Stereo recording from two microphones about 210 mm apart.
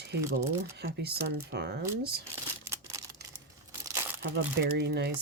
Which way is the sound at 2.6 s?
15° right (ahead or behind).